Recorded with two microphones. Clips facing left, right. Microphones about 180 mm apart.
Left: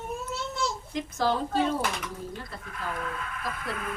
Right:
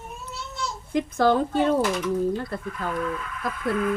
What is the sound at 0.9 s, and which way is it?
Speech, 55° right (ahead or behind).